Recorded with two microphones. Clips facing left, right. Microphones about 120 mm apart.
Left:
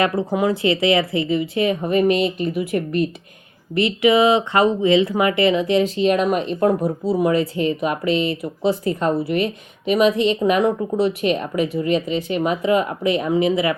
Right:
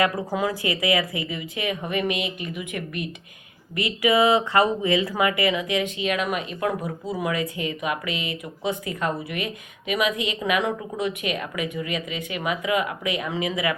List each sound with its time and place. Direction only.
0.0 s speech: 25° left (ahead or behind)